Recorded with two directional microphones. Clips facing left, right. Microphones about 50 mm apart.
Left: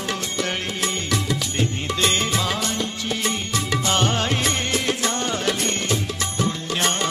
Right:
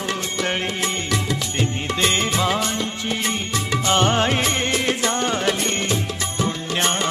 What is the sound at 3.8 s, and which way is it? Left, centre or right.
Music, right.